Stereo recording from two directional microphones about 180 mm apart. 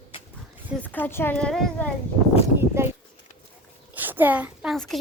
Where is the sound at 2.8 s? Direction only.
15° right (ahead or behind); by 5.0 s centre (ahead or behind).